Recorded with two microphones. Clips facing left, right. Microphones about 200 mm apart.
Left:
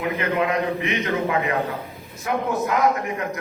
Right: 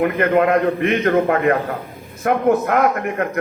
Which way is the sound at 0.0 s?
55° right (ahead or behind).